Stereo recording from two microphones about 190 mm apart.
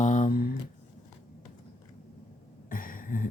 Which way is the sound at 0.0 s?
40° left (ahead or behind).